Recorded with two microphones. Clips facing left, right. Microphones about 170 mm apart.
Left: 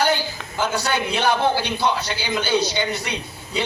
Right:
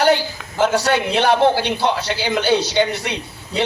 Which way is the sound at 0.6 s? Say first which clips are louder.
Right 6 dB; 75° right (ahead or behind).